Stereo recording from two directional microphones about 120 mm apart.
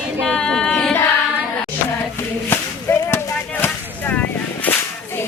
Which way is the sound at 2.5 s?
20° left (ahead or behind).